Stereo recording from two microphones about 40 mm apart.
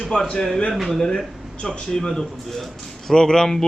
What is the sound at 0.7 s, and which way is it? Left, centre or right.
Speech, centre.